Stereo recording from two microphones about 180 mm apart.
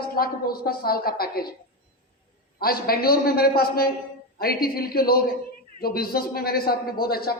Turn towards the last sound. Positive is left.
turn(degrees=55)  # may be behind; listen again after turning